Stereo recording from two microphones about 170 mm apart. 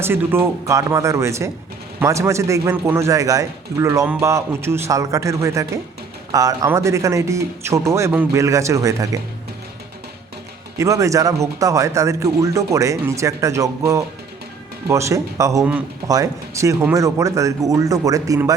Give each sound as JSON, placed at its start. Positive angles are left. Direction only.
{"t": 0.0, "sound": "a man's voice", "side_deg": -15}
{"t": 10.8, "sound": "a man's voice", "side_deg": -20}